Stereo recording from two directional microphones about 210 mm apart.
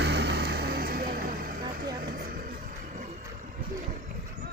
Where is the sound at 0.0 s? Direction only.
50° right (ahead or behind); by 3.2 s 35° right (ahead or behind).